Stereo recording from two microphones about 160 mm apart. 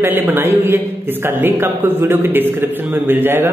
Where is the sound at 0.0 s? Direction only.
10° right (ahead or behind).